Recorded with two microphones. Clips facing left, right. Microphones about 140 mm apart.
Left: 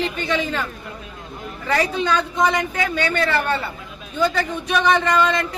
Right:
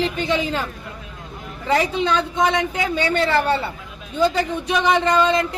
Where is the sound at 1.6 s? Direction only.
20° right (ahead or behind).